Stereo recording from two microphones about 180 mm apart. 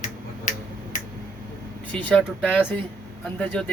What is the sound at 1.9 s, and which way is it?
Speech, 5° left (ahead or behind).